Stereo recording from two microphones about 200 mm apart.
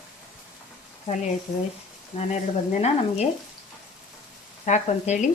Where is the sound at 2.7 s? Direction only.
35° left (ahead or behind).